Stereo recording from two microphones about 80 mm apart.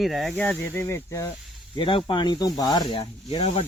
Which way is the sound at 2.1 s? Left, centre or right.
Left.